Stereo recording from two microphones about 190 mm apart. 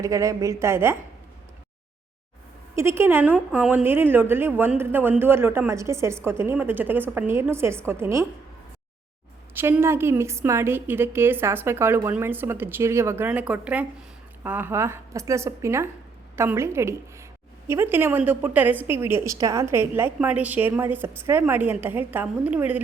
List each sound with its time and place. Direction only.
0.0 s a woman's voice: 15° right (ahead or behind)
2.7 s a woman's voice: 15° right (ahead or behind)
9.6 s a woman's voice: 10° right (ahead or behind)